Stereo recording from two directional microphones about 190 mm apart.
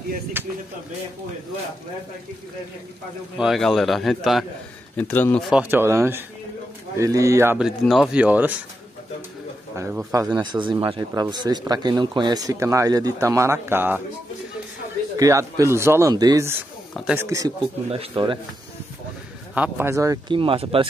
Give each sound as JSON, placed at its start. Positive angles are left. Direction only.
{"t": 0.4, "sound": "speech", "side_deg": -10}
{"t": 3.3, "sound": "a man's voice", "side_deg": 0}
{"t": 4.9, "sound": "a man's voice", "side_deg": 10}
{"t": 5.5, "sound": "speech", "side_deg": -10}
{"t": 9.8, "sound": "speech", "side_deg": -15}
{"t": 15.1, "sound": "speech", "side_deg": -15}
{"t": 16.9, "sound": "speech", "side_deg": 0}
{"t": 17.2, "sound": "speech", "side_deg": -15}
{"t": 17.8, "sound": "speech", "side_deg": -30}
{"t": 19.5, "sound": "speech", "side_deg": -10}